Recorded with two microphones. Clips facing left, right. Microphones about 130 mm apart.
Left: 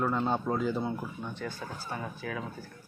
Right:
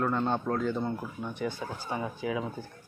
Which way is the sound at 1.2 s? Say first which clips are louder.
Right 4 dB; 15° right (ahead or behind).